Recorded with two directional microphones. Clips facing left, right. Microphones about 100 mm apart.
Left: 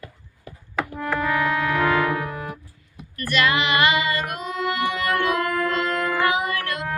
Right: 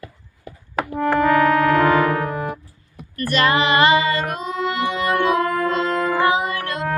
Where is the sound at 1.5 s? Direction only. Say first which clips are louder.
Right 6 dB; 35° right (ahead or behind).